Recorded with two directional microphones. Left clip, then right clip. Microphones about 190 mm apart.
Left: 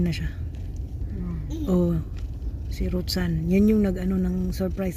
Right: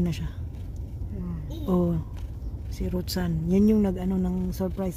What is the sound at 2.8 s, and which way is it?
Speech, 15° right (ahead or behind).